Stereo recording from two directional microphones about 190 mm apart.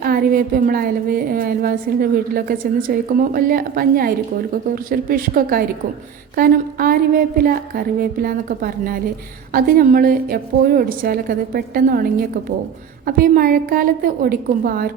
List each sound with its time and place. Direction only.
0.0 s a woman's voice: 50° right (ahead or behind)
13.1 s a woman's voice: 50° right (ahead or behind)